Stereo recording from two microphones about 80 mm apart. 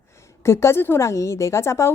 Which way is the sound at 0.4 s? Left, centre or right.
Left.